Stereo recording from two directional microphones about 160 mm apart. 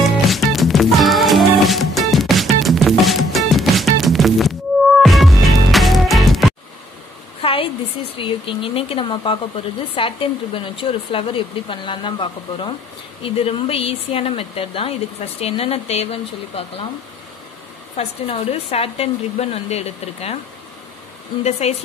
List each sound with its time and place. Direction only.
0.0 s music: centre (ahead or behind)
7.4 s a sound: 35° left (ahead or behind)
8.2 s speech: 35° left (ahead or behind)
17.9 s speech: 40° left (ahead or behind)
21.5 s speech: 40° left (ahead or behind)